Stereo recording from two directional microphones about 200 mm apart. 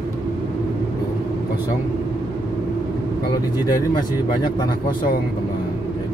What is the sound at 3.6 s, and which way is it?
Speech, 20° left (ahead or behind).